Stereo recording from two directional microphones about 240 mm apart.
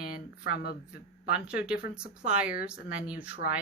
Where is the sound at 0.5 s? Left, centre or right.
Left.